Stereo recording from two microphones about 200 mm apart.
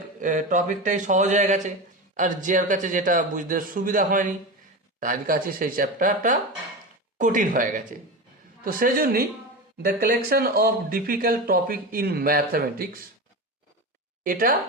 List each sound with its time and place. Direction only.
0.2 s a man's voice: 40° right (ahead or behind)
14.3 s speech: 45° right (ahead or behind)